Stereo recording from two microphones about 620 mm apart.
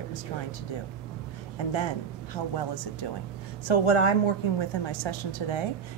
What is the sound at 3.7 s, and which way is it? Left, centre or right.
A woman's voice, left.